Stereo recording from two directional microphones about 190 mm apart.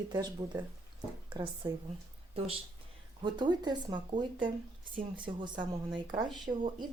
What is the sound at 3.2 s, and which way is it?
Speech, 25° right (ahead or behind).